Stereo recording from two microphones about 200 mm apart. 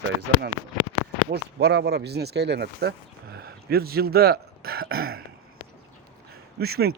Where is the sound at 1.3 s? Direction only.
55° right (ahead or behind).